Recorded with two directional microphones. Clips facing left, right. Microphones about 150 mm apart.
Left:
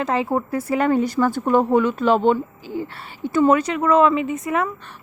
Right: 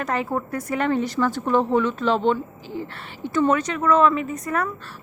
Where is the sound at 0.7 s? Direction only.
40° left (ahead or behind).